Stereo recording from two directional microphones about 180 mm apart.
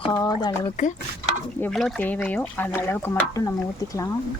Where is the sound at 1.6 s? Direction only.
Centre (ahead or behind).